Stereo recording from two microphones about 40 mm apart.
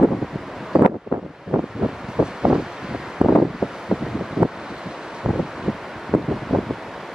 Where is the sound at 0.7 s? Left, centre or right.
Right.